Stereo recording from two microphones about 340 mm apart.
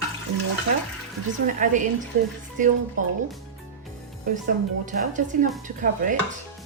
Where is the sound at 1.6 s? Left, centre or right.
Right.